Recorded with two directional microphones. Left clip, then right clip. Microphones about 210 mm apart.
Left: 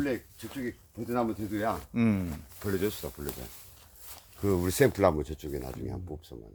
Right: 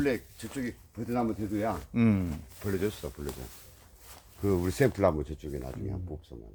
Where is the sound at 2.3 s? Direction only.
15° left (ahead or behind); by 6.3 s 45° left (ahead or behind).